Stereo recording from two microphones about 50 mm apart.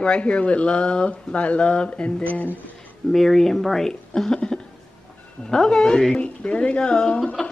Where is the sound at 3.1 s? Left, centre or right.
Centre.